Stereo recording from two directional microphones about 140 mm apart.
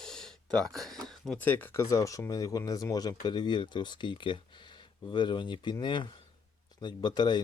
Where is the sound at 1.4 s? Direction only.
15° left (ahead or behind).